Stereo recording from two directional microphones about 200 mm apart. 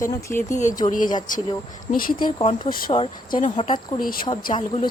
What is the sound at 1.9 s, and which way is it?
Speech, 45° left (ahead or behind).